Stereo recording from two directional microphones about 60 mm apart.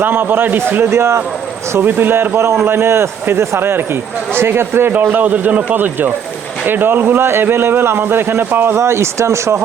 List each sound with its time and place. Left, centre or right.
0.0 s a man's voice: right
0.9 s speech: right
1.8 s a man's voice: right